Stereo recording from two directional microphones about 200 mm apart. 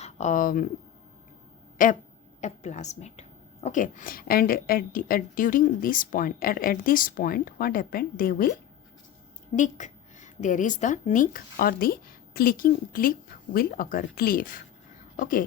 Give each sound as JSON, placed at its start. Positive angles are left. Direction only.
{"t": 0.0, "sound": "speech", "side_deg": 35}
{"t": 1.8, "sound": "a woman's voice", "side_deg": 45}
{"t": 9.6, "sound": "a woman's voice", "side_deg": 40}